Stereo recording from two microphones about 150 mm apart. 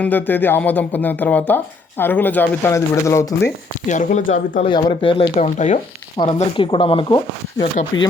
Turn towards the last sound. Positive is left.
turn(degrees=50)  # may be behind; listen again after turning